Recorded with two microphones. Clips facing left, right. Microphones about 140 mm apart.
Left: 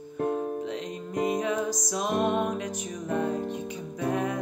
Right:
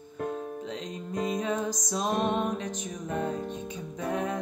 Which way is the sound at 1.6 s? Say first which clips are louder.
Left 1 dB; 20° right (ahead or behind).